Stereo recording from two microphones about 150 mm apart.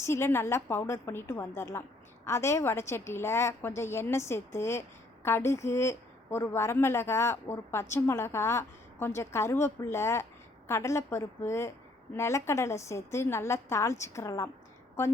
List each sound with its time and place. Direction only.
0.0 s a woman's voice: 15° left (ahead or behind)